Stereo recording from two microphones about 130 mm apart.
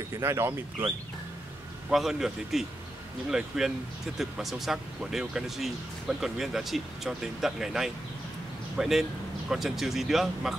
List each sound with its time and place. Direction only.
0.2 s speech: 20° right (ahead or behind)
1.9 s speech: centre (ahead or behind)